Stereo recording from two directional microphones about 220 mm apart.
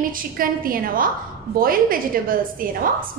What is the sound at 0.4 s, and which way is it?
A woman's voice, 40° right (ahead or behind).